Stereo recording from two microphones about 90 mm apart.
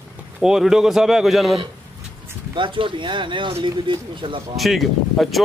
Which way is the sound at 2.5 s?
65° right (ahead or behind).